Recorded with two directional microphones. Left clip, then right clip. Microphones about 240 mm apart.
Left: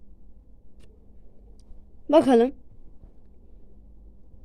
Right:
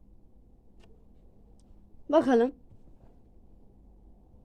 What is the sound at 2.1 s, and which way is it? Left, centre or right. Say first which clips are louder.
Speech: left 5 dB; centre.